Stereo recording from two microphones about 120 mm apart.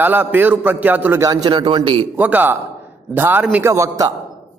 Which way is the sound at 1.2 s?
30° right (ahead or behind).